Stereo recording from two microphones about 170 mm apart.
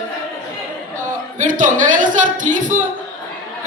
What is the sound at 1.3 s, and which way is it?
A man's voice, 50° right (ahead or behind).